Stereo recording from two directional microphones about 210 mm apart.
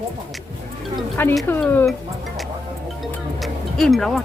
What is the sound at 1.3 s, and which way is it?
Speech, 5° left (ahead or behind).